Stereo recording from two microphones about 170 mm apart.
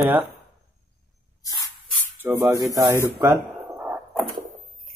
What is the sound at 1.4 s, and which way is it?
Spray, 20° left (ahead or behind).